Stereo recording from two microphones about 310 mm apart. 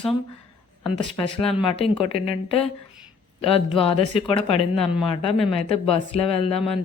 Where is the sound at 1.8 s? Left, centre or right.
Centre.